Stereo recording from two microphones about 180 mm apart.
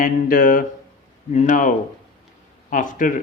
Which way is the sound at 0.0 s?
50° left (ahead or behind).